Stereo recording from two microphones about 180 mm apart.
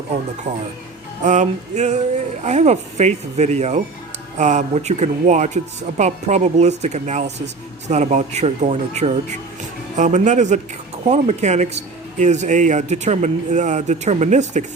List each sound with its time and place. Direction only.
1.2 s speech: 45° right (ahead or behind)